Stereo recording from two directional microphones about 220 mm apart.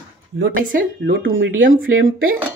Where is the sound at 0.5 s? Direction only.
40° right (ahead or behind).